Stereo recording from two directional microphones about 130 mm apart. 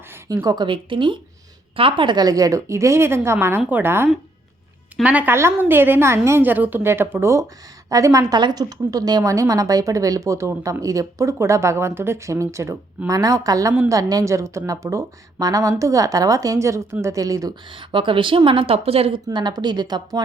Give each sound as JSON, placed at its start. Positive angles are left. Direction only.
{"t": 0.4, "sound": "a woman's voice", "side_deg": -35}
{"t": 17.7, "sound": "a woman's voice", "side_deg": -40}